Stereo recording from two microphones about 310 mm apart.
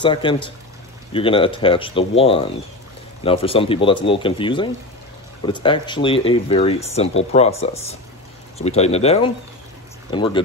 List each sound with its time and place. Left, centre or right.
0.0 s speech: centre